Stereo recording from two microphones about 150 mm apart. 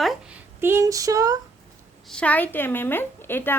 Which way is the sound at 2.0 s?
5° left (ahead or behind).